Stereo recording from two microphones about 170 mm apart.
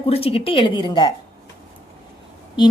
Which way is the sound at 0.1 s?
35° left (ahead or behind).